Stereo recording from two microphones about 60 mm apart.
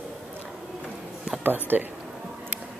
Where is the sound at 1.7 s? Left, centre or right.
Right.